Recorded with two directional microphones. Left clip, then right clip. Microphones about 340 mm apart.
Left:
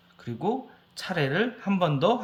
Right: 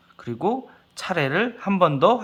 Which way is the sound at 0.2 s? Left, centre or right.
Centre.